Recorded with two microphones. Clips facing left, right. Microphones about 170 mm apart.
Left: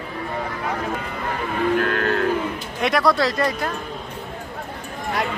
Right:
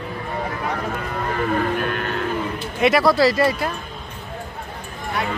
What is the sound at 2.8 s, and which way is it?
Speech, centre (ahead or behind).